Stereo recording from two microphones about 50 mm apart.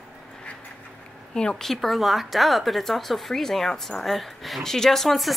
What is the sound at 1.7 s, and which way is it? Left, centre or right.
Speech, centre.